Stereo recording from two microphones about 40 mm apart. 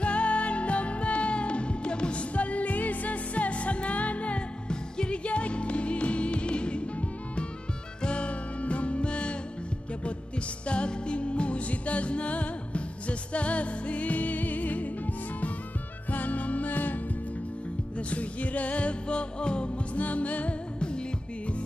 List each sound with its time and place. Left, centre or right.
0.0 s music: left
10.7 s music: left
16.1 s music: left
17.9 s music: left
20.0 s music: left